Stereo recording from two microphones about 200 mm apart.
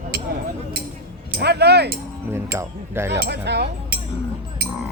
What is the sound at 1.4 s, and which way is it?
Speech, 55° right (ahead or behind).